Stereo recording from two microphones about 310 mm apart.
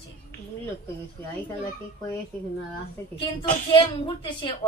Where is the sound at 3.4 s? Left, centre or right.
Centre.